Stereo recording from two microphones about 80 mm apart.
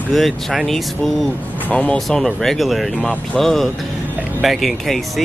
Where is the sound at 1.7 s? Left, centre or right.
Centre.